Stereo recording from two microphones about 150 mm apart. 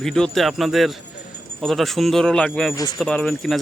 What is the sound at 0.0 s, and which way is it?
Speech, centre (ahead or behind).